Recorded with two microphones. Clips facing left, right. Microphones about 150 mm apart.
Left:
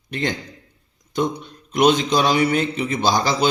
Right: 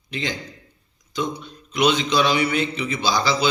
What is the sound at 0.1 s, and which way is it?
A man's voice, 55° left (ahead or behind).